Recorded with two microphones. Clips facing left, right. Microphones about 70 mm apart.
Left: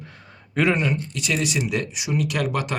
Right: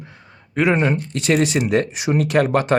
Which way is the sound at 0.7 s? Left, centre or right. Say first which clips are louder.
Right 5 dB; right.